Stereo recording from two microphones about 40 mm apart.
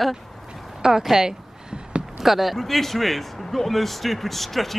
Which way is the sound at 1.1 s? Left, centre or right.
Centre.